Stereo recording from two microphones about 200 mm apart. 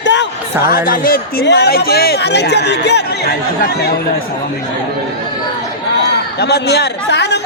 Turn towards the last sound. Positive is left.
turn(degrees=55)  # may be behind; listen again after turning